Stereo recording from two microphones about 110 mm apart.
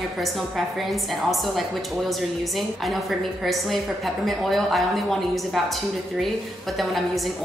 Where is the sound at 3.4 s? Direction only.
Centre (ahead or behind).